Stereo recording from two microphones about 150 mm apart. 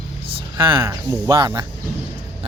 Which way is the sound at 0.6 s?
35° right (ahead or behind).